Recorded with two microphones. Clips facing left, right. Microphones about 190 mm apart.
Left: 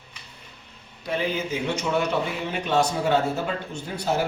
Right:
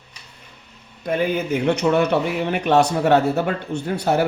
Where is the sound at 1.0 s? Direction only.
55° right (ahead or behind).